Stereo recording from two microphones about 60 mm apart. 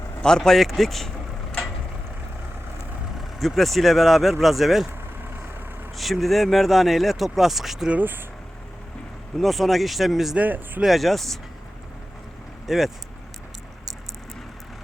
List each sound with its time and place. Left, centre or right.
0.2 s speech: centre
3.4 s speech: centre
6.0 s speech: centre
9.4 s speech: centre
10.3 s speech: right
10.8 s speech: centre
12.6 s speech: centre